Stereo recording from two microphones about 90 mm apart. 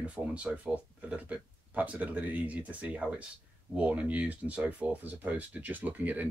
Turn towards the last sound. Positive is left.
turn(degrees=-20)  # may be behind; listen again after turning